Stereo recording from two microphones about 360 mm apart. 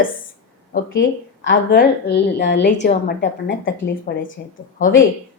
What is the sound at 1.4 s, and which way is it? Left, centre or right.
A woman's voice, left.